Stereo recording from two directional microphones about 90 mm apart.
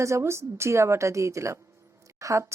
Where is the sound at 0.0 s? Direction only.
30° right (ahead or behind).